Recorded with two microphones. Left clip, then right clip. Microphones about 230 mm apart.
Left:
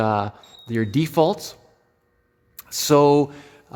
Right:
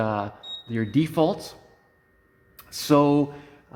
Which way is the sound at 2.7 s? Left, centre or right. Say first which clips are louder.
Left 4 dB; left.